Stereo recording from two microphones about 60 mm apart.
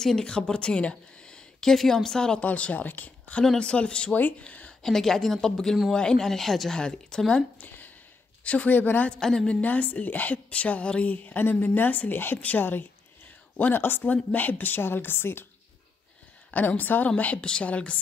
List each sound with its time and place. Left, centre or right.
0.0 s a woman's voice: centre
4.8 s speech: centre
6.8 s speech: centre
7.5 s a sound: left
8.5 s a woman's voice: left
9.1 s speech: centre
9.5 s a woman's voice: left
12.5 s a sound: left
14.0 s a woman's voice: left
16.5 s a woman's voice: left
17.2 s a woman's voice: left